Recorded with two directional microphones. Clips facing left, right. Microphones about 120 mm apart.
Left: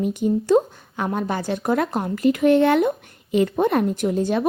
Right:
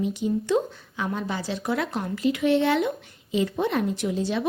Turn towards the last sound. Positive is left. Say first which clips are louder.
# left 5 dB
turn(degrees=50)  # may be behind; listen again after turning